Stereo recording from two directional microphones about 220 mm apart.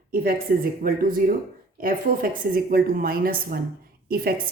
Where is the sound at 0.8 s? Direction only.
40° right (ahead or behind).